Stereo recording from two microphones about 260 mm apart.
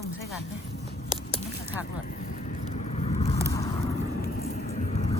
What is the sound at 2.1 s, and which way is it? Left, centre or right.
Vehicle, left.